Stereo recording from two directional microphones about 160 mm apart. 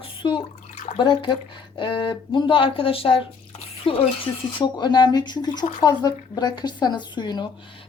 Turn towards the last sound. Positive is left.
turn(degrees=25)  # may be behind; listen again after turning